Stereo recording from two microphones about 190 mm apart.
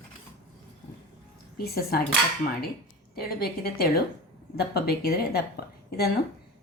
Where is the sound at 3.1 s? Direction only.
55° left (ahead or behind).